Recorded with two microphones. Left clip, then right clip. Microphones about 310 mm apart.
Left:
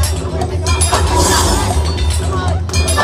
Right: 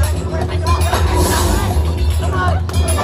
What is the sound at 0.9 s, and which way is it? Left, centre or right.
Music, left.